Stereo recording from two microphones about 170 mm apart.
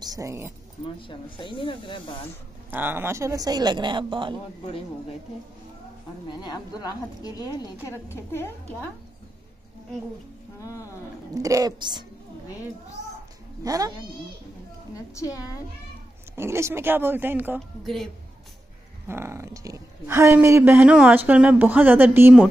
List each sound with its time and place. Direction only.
0.0 s speech: 20° right (ahead or behind)
0.8 s speech: 30° left (ahead or behind)
2.7 s speech: 10° right (ahead or behind); by 4.4 s 30° right (ahead or behind)
6.2 s a woman's voice: 25° left (ahead or behind)
10.6 s a woman's voice: 20° left (ahead or behind)
11.3 s speech: 20° right (ahead or behind)
13.7 s speech: 20° right (ahead or behind)
15.1 s a woman's voice: 20° left (ahead or behind)
16.3 s speech: 15° right (ahead or behind)
17.6 s a woman's voice: centre (ahead or behind)
19.0 s speech: 15° right (ahead or behind)